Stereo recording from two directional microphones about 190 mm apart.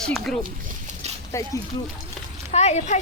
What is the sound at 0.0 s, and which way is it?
Speech, centre (ahead or behind).